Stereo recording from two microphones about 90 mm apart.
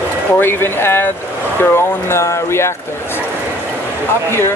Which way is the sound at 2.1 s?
30° left (ahead or behind).